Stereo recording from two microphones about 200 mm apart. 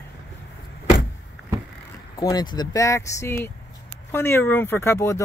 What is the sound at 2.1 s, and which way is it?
Speech, 20° left (ahead or behind).